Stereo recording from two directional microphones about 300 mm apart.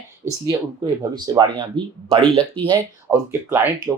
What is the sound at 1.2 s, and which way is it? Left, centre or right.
Speech, centre.